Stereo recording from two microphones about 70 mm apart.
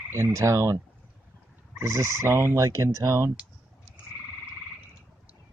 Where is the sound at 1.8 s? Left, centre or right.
Right.